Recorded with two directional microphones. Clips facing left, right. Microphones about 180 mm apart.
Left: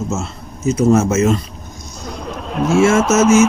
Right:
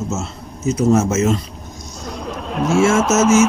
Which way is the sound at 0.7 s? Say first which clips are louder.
Left 2 dB; 55° left (ahead or behind).